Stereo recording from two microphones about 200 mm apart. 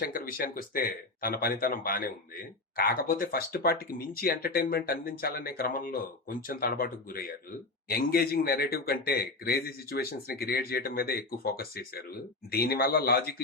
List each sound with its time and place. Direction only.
0.0 s speech: 45° left (ahead or behind)